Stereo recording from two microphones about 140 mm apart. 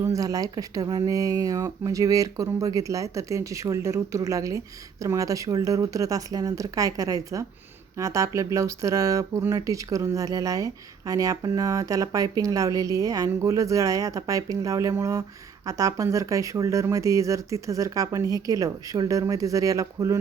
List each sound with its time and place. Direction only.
0.0 s speech: 25° right (ahead or behind)